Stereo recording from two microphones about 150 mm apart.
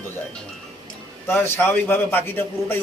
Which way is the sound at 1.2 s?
15° left (ahead or behind).